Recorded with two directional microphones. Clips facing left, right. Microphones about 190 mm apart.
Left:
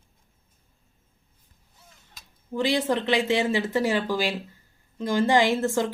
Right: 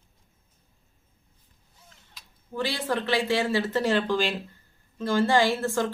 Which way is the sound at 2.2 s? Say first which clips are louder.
Even; 45° left (ahead or behind).